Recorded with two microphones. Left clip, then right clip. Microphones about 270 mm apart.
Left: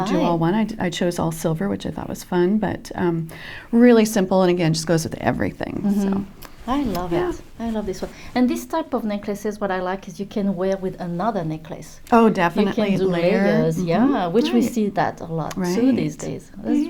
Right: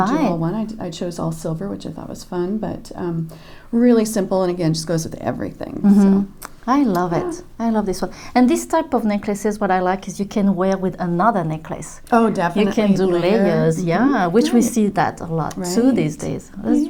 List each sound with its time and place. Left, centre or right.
0.1 s a woman's voice: right
0.4 s speech: left
5.8 s a woman's voice: right
12.1 s speech: left
13.2 s speech: right